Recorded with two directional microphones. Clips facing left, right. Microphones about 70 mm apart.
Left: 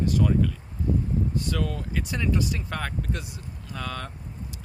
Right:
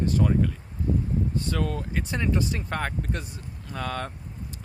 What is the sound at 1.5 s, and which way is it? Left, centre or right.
Speech, right.